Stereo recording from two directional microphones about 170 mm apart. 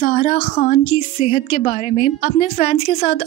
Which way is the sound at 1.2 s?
40° left (ahead or behind).